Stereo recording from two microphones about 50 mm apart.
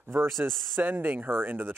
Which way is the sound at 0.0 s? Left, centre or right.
Right.